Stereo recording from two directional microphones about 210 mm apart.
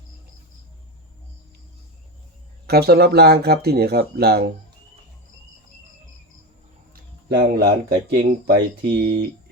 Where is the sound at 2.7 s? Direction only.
50° right (ahead or behind).